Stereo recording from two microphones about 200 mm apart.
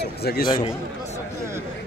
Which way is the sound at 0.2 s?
50° left (ahead or behind).